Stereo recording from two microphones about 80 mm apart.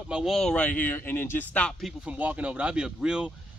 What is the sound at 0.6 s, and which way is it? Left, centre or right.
Speech, left.